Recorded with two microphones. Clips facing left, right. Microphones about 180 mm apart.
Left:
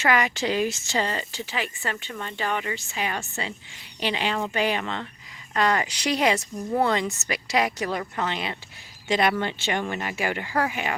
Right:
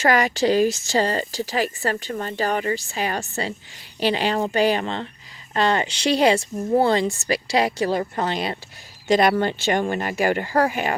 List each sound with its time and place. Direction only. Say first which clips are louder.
0.0 s speech: right 5 dB; 40° right (ahead or behind)